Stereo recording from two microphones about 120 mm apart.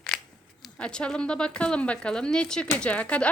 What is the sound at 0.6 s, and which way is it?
Speech, 5° left (ahead or behind).